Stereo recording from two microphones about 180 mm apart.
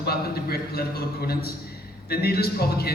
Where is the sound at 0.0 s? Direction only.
60° left (ahead or behind).